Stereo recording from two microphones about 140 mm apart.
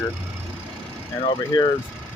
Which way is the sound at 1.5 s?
30° left (ahead or behind).